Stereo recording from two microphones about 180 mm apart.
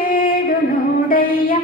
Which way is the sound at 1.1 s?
55° left (ahead or behind).